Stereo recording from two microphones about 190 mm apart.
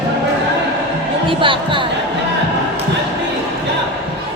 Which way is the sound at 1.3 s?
25° right (ahead or behind).